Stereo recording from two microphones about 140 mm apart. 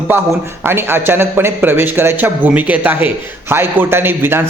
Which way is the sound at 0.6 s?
15° right (ahead or behind).